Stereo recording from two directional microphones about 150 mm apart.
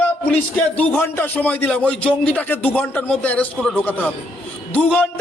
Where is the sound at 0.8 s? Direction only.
15° left (ahead or behind).